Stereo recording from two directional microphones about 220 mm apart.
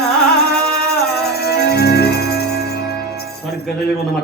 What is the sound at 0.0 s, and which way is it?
Music, 45° left (ahead or behind).